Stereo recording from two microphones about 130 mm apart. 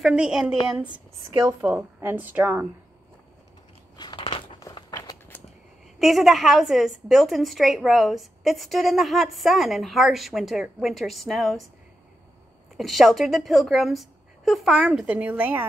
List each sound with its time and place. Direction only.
0.0 s a woman's voice: 5° right (ahead or behind)
3.9 s biting: 35° left (ahead or behind)
4.6 s crumpling: 25° left (ahead or behind)
5.9 s a woman's voice: centre (ahead or behind)
12.7 s a woman's voice: centre (ahead or behind)